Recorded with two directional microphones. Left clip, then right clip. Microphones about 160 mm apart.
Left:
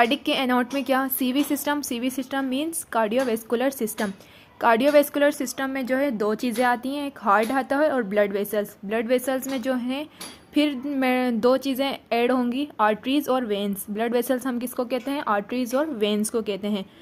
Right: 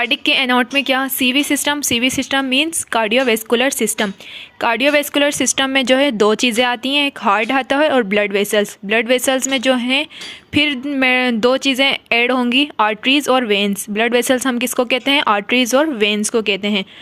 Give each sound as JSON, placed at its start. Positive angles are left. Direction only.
{"t": 0.0, "sound": "a woman's voice", "side_deg": -15}